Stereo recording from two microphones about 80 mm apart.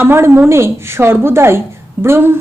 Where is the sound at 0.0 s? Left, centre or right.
Right.